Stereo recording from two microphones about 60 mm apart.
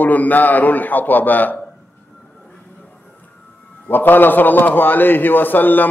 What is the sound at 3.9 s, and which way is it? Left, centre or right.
A man's voice, left.